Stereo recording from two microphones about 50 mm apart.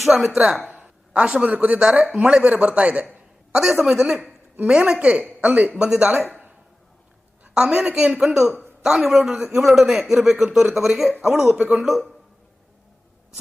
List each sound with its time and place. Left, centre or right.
0.0 s speech: centre
3.6 s a woman's voice: centre
7.5 s a woman's voice: centre